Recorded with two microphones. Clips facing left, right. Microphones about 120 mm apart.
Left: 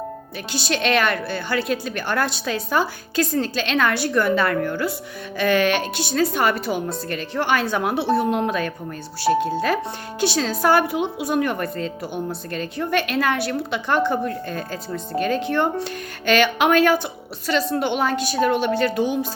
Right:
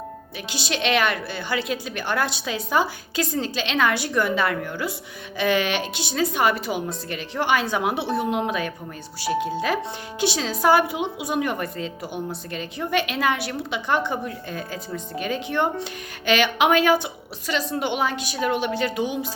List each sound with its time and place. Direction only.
0.5 s a woman's voice: 15° right (ahead or behind)